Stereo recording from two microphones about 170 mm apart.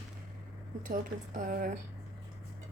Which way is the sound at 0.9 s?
50° right (ahead or behind).